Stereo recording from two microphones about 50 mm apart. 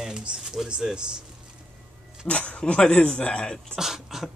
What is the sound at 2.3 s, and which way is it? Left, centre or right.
Speech, left.